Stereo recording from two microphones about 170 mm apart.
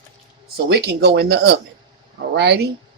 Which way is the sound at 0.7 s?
80° right.